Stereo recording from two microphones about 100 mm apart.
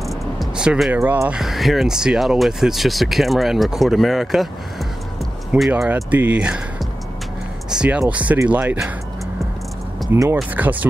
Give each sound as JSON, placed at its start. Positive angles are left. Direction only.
{"t": 0.0, "sound": "music", "side_deg": 0}
{"t": 0.7, "sound": "speech", "side_deg": -5}
{"t": 0.9, "sound": "speech", "side_deg": -20}
{"t": 1.3, "sound": "speech", "side_deg": 0}
{"t": 5.5, "sound": "speech", "side_deg": -10}
{"t": 7.7, "sound": "speech", "side_deg": -10}
{"t": 10.1, "sound": "speech", "side_deg": -35}
{"t": 10.5, "sound": "speech", "side_deg": -15}